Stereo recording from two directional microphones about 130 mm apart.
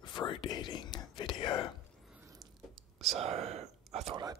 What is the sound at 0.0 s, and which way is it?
Whispering, 35° left (ahead or behind).